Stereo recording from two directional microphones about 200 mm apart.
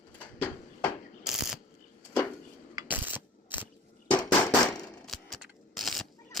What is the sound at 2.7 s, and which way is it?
Coin, 10° right (ahead or behind).